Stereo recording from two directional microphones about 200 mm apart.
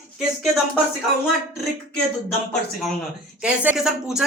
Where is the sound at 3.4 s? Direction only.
5° right (ahead or behind).